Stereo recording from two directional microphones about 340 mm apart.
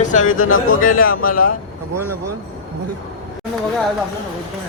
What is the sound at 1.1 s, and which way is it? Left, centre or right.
Speech, left.